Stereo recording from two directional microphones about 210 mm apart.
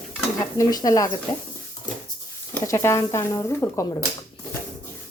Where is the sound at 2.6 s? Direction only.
15° left (ahead or behind).